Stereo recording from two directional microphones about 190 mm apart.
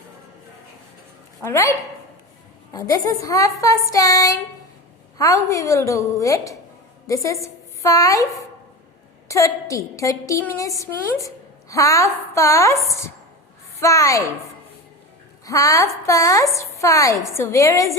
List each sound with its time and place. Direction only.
1.4 s a woman's voice: 15° left (ahead or behind)
2.7 s a woman's voice: 20° left (ahead or behind)
9.3 s a woman's voice: 15° left (ahead or behind)
15.4 s a woman's voice: 15° left (ahead or behind)